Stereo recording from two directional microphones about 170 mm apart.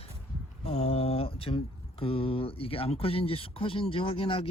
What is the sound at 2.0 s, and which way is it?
Speech, 35° left (ahead or behind).